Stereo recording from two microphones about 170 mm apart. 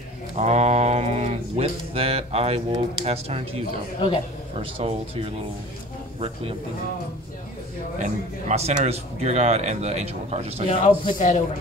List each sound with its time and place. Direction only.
0.4 s speech: 40° right (ahead or behind)
8.0 s speech: 40° right (ahead or behind)
10.7 s speech: 30° left (ahead or behind)
11.1 s a man's voice: 45° left (ahead or behind)